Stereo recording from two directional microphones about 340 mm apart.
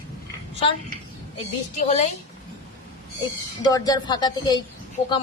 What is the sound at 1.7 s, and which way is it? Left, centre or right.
Speech, centre.